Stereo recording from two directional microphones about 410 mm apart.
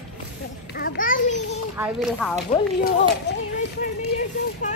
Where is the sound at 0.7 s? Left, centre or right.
Left.